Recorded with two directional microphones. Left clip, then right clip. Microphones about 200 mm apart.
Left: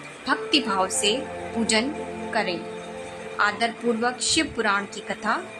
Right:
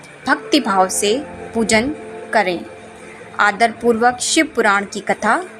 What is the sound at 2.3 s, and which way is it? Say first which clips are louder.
A woman's voice: right 10 dB; 30° right (ahead or behind).